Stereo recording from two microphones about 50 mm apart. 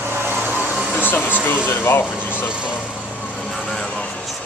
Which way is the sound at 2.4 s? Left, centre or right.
Right.